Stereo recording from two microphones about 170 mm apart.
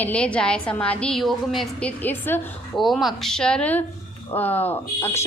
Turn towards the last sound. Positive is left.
turn(degrees=15)  # may be behind; listen again after turning